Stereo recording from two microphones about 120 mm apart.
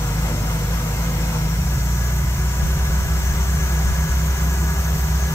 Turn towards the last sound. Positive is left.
turn(degrees=25)  # may be behind; listen again after turning